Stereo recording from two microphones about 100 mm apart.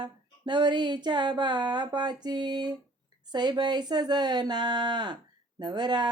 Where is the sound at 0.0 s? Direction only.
50° right (ahead or behind).